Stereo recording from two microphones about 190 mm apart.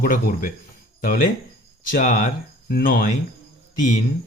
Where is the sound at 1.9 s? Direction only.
45° left (ahead or behind).